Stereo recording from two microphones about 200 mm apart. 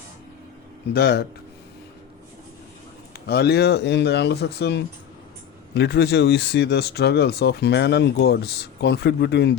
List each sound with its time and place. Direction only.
0.9 s speech: 55° left (ahead or behind)
3.1 s speech: 55° left (ahead or behind)